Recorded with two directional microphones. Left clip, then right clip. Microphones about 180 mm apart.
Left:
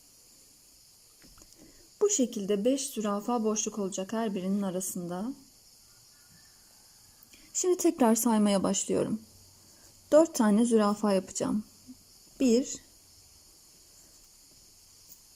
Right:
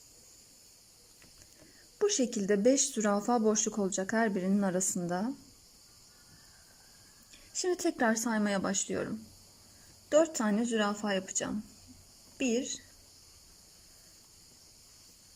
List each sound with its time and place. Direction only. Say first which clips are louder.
2.0 s speech: left 2 dB; 20° left (ahead or behind)
7.5 s speech: left 5 dB; 20° left (ahead or behind)